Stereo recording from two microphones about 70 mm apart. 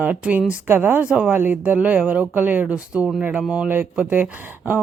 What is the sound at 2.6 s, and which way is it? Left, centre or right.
Speech, centre.